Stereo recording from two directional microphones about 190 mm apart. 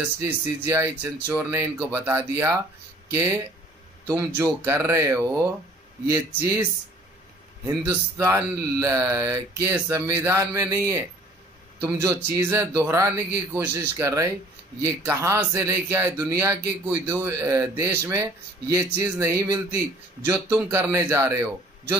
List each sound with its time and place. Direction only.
0.2 s speech: 15° right (ahead or behind)
7.6 s speech: 15° right (ahead or behind)